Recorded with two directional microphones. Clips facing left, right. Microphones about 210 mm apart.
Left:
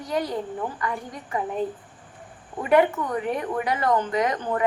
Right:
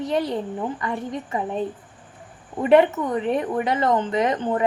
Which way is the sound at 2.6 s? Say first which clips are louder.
Right 4 dB; 25° right (ahead or behind).